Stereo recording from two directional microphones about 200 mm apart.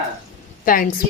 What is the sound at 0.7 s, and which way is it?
Speech, 45° left (ahead or behind).